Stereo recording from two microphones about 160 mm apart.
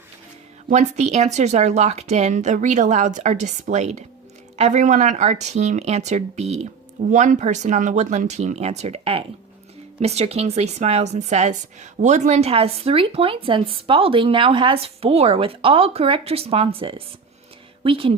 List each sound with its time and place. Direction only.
0.7 s speech: 45° right (ahead or behind)